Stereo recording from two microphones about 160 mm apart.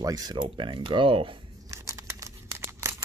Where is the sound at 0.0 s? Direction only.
25° right (ahead or behind).